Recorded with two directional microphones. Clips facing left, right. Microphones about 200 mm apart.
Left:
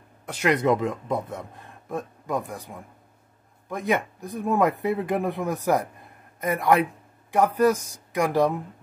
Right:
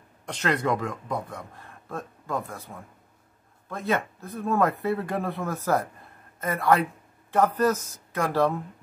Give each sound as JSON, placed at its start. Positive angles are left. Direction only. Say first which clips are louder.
{"t": 0.2, "sound": "speech", "louder": "left 4 dB", "side_deg": 10}